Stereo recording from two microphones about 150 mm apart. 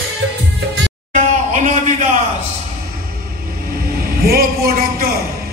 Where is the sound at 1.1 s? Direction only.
50° right (ahead or behind).